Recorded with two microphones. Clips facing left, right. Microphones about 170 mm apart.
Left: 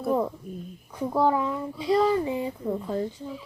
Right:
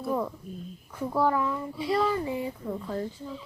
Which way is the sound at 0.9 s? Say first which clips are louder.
Left 3 dB; 15° left (ahead or behind).